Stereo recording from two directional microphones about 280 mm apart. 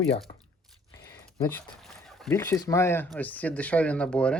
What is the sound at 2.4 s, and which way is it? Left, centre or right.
Speech, centre.